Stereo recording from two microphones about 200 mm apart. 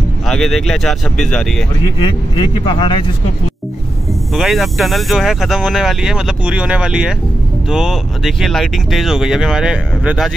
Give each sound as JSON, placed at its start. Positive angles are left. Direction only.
{"t": 0.3, "sound": "speech", "side_deg": 0}
{"t": 2.3, "sound": "speech", "side_deg": 25}
{"t": 4.3, "sound": "speech", "side_deg": 0}